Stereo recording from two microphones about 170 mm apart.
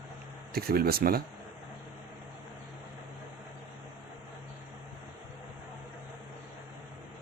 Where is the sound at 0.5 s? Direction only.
60° right (ahead or behind).